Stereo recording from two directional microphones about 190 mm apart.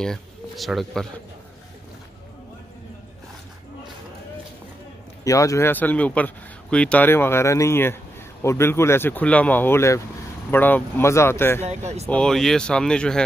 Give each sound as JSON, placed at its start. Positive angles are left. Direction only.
{"t": 0.0, "sound": "speech", "side_deg": 0}
{"t": 5.2, "sound": "speech", "side_deg": 15}
{"t": 11.6, "sound": "speech", "side_deg": -35}
{"t": 12.1, "sound": "speech", "side_deg": 5}